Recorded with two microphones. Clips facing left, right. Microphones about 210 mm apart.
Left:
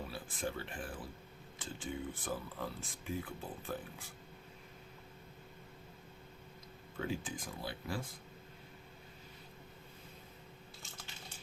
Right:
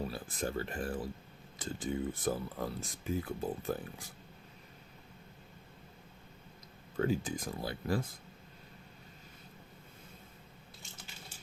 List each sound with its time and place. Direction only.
0.1 s speech: 40° right (ahead or behind)
6.9 s speech: 45° right (ahead or behind)